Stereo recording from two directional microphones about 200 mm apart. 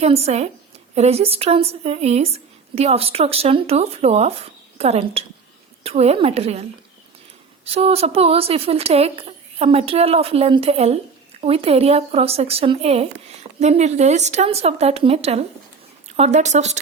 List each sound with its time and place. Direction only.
0.0 s a woman's voice: 30° right (ahead or behind)